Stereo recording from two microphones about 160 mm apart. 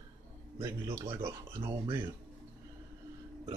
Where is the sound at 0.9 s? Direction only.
15° right (ahead or behind).